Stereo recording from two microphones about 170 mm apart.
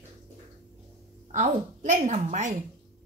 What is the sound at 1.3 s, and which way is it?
A woman's voice, 45° right (ahead or behind).